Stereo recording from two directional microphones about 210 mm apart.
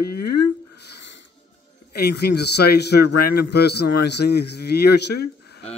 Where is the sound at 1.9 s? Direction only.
50° left (ahead or behind).